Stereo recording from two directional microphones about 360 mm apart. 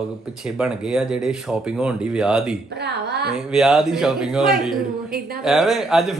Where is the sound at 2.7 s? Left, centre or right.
Right.